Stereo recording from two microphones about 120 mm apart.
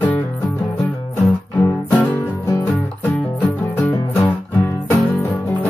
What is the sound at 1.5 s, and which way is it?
Music, 15° left (ahead or behind).